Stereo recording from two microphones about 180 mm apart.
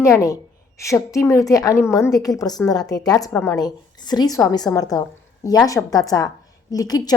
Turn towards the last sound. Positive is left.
turn(degrees=20)  # may be behind; listen again after turning